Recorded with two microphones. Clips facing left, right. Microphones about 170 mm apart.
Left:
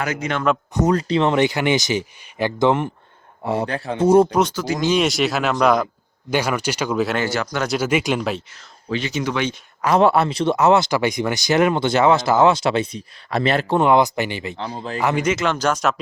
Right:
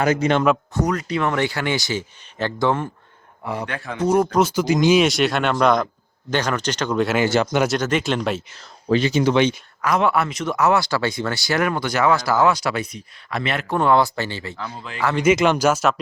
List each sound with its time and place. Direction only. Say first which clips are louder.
0.0 s speech: right 6 dB; 30° right (ahead or behind)
0.7 s speech: left 4 dB; 25° left (ahead or behind)
3.4 s speech: left 5 dB; 30° left (ahead or behind)
4.5 s speech: right 4 dB; 15° right (ahead or behind)
4.9 s speech: right 1 dB; centre (ahead or behind)
7.3 s speech: right 5 dB; 25° right (ahead or behind)
7.7 s speech: left 1 dB; 10° left (ahead or behind)
8.9 s speech: right 6 dB; 35° right (ahead or behind)
9.8 s speech: left 4 dB; 30° left (ahead or behind)
13.7 s speech: left 1 dB; 20° left (ahead or behind); by 15.0 s 35° left (ahead or behind)
15.2 s speech: right 4 dB; 15° right (ahead or behind)